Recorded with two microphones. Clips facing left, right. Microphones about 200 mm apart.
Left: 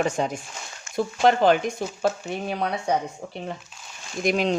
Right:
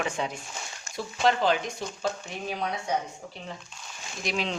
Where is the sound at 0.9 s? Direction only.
55° left (ahead or behind).